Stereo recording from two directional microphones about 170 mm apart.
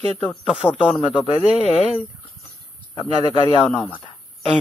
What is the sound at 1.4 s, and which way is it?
Speech, 35° left (ahead or behind).